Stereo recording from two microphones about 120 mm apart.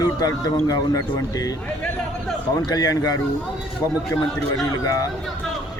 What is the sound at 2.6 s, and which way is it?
Speech, 35° left (ahead or behind).